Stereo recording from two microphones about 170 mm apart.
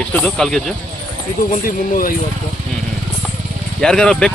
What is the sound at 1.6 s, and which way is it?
Speech, 55° left (ahead or behind).